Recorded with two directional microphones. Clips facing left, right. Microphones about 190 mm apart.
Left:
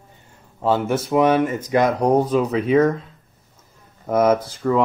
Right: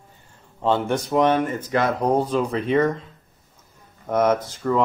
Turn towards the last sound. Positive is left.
turn(degrees=0)  # may be behind; listen again after turning